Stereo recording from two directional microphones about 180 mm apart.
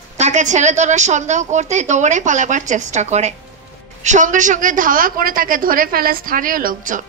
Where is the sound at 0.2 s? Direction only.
40° right (ahead or behind).